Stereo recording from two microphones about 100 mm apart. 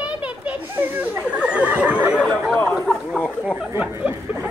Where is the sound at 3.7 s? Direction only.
10° right (ahead or behind).